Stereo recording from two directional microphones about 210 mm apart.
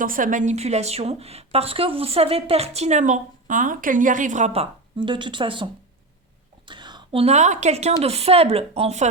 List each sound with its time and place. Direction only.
0.0 s speech: 40° right (ahead or behind); by 5.6 s 25° right (ahead or behind)
6.7 s a woman's voice: 20° right (ahead or behind)